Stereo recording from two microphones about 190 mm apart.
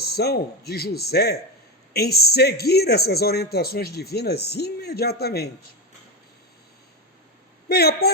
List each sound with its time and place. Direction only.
0.2 s speech: 55° left (ahead or behind)
7.7 s speech: 55° left (ahead or behind)